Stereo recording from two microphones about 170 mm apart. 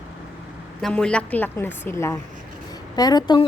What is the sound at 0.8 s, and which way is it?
A woman's voice, 5° left (ahead or behind).